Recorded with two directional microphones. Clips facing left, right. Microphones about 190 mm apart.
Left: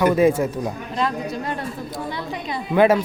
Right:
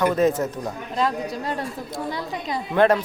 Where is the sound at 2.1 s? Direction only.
40° right (ahead or behind).